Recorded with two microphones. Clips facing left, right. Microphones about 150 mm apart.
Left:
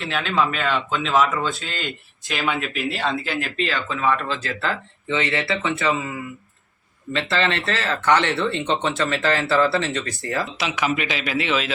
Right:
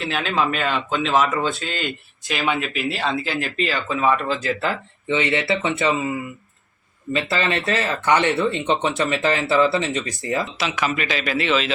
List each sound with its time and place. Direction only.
0.0 s speech: 5° right (ahead or behind); by 10.4 s 20° right (ahead or behind)
10.4 s speech: 10° left (ahead or behind)